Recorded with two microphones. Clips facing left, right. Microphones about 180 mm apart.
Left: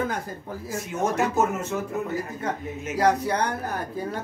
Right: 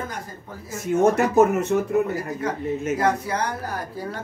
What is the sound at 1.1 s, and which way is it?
Speech, 65° right (ahead or behind).